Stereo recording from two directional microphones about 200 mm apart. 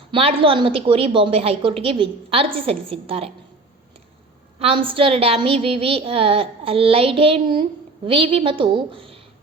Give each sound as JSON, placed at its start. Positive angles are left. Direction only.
{"t": 0.1, "sound": "a woman's voice", "side_deg": -25}
{"t": 4.6, "sound": "a woman's voice", "side_deg": -25}